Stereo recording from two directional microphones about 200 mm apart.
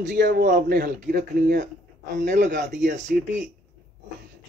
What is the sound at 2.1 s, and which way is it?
A man's voice, 40° right (ahead or behind).